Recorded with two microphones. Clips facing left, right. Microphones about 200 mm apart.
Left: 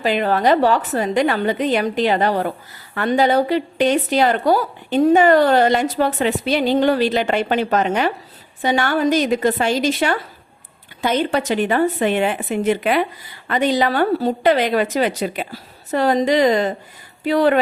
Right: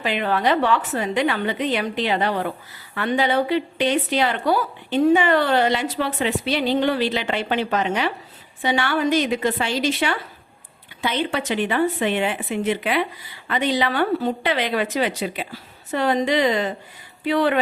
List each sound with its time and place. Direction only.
0.0 s a woman's voice: 40° left (ahead or behind)